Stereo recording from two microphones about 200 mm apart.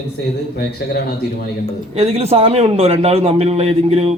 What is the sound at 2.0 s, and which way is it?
A man's voice, 30° right (ahead or behind).